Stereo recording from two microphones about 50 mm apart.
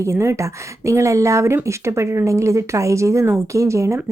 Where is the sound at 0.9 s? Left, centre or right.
Right.